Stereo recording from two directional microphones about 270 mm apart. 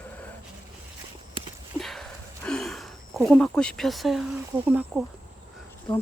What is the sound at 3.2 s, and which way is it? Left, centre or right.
Speech, centre.